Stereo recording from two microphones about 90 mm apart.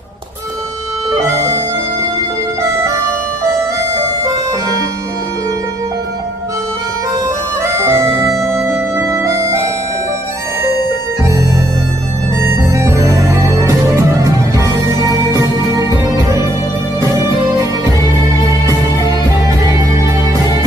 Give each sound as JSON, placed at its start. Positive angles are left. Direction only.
{"t": 2.6, "sound": "music", "side_deg": -30}
{"t": 7.8, "sound": "bagpipes", "side_deg": -30}
{"t": 8.4, "sound": "music", "side_deg": -30}
{"t": 12.7, "sound": "music", "side_deg": -35}
{"t": 17.0, "sound": "music", "side_deg": -40}